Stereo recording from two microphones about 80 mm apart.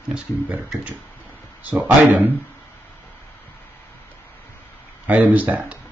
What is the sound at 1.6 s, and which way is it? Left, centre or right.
Speech, centre.